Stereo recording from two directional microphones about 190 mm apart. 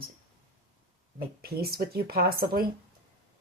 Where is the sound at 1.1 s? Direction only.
55° right (ahead or behind).